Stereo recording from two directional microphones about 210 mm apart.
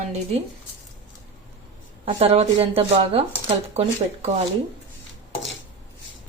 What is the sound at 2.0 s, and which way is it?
Speech, 30° right (ahead or behind).